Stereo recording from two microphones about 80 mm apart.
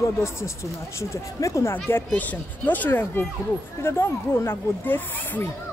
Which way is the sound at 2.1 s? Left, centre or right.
Left.